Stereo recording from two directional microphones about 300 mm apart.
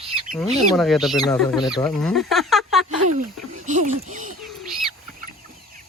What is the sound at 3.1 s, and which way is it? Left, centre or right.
Speech, right.